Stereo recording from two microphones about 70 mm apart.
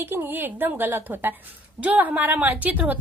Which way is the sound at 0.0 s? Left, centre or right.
Right.